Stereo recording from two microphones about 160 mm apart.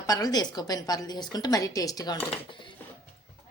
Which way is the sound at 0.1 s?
25° left (ahead or behind).